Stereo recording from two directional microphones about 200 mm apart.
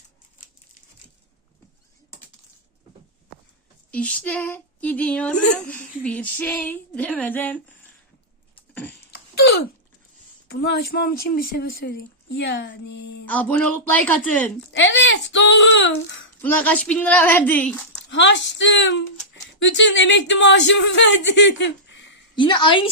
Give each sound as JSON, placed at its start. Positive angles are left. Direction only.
{"t": 3.9, "sound": "speech", "side_deg": 5}
{"t": 8.5, "sound": "a sound", "side_deg": 10}
{"t": 10.5, "sound": "a woman's voice", "side_deg": 50}
{"t": 13.2, "sound": "speech", "side_deg": 5}
{"t": 14.7, "sound": "speech", "side_deg": 65}
{"t": 16.4, "sound": "speech", "side_deg": 10}
{"t": 18.1, "sound": "speech", "side_deg": 65}
{"t": 22.4, "sound": "a woman's voice", "side_deg": 25}